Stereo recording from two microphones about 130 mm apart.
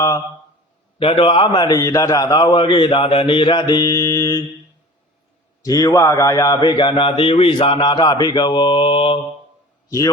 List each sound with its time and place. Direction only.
0.9 s a man's voice: 45° left (ahead or behind); by 4.4 s 25° left (ahead or behind)
5.6 s a man's voice: 25° left (ahead or behind); by 9.2 s 40° left (ahead or behind)